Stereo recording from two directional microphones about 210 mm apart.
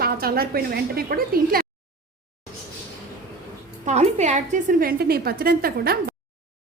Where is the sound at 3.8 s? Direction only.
30° right (ahead or behind).